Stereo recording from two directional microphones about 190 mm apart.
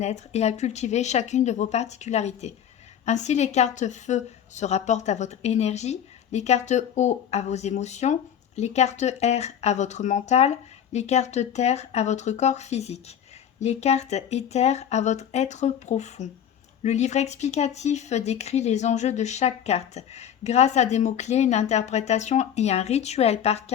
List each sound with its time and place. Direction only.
0.0 s a woman's voice: 35° left (ahead or behind)